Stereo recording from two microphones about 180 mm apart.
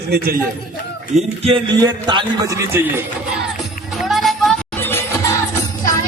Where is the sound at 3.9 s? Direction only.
Centre (ahead or behind).